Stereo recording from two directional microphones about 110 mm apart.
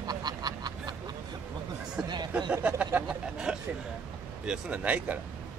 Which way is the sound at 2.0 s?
40° right (ahead or behind).